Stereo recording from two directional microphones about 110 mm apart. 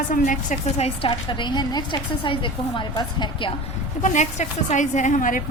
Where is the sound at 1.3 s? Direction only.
45° left (ahead or behind).